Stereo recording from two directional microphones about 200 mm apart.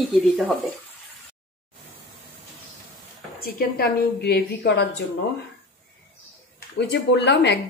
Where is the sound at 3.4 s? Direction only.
50° left (ahead or behind).